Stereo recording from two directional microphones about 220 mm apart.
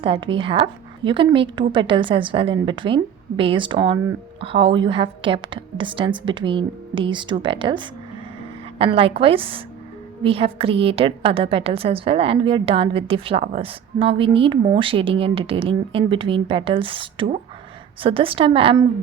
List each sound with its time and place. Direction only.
0.0 s a woman's voice: 25° right (ahead or behind)